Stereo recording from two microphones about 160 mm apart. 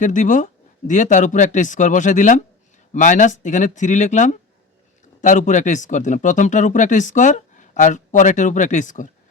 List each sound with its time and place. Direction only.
0.0 s speech: 55° left (ahead or behind)